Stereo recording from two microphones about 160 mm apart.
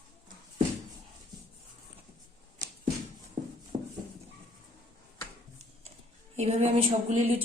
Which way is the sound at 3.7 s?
30° right (ahead or behind).